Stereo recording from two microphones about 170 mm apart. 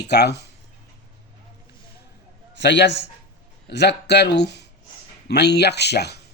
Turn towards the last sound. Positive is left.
turn(degrees=75)  # may be behind; listen again after turning